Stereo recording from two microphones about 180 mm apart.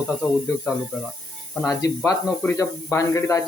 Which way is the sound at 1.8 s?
15° left (ahead or behind).